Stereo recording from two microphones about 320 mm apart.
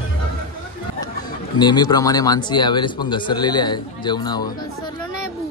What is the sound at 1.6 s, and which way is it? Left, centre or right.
Speech, centre.